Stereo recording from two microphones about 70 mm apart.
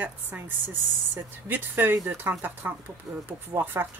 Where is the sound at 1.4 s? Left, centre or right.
Right.